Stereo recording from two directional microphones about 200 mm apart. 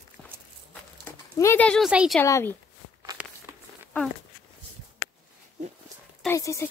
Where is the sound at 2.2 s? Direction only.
15° left (ahead or behind).